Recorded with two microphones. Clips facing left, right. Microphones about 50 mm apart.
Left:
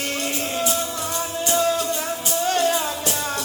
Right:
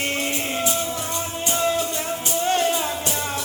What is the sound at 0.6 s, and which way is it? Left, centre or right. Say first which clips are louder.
Music: left 1 dB; centre.